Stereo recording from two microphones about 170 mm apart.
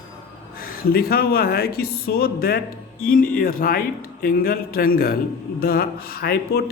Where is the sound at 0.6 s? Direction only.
60° left (ahead or behind).